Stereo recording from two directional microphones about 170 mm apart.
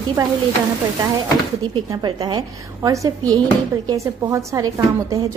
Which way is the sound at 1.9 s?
25° right (ahead or behind).